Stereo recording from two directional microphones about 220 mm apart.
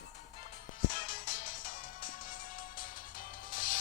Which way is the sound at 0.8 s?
40° left (ahead or behind).